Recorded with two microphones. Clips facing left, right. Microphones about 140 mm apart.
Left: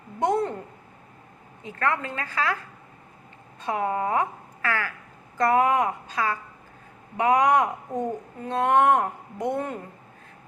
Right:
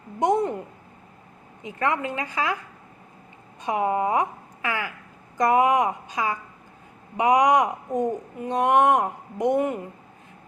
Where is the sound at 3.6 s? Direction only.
20° right (ahead or behind).